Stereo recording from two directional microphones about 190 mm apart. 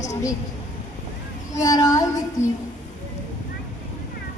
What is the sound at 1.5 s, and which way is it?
Child singing, 20° left (ahead or behind).